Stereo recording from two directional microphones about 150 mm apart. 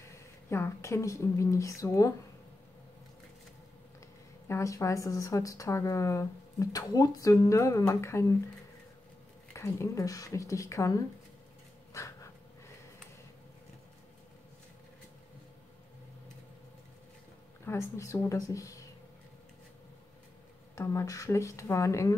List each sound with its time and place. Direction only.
0.1 s speech: 20° left (ahead or behind)
4.5 s speech: 20° left (ahead or behind)
9.5 s speech: 20° left (ahead or behind)
11.9 s dog: 20° left (ahead or behind)
17.6 s speech: 20° left (ahead or behind)
20.7 s speech: 20° left (ahead or behind)